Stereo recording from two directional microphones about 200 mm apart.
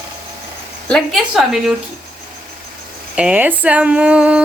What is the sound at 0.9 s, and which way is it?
Speech, centre (ahead or behind).